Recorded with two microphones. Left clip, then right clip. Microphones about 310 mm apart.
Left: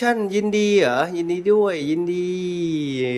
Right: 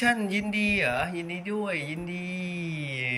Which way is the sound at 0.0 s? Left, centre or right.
Left.